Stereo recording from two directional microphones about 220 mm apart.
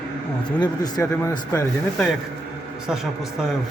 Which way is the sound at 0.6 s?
20° left (ahead or behind).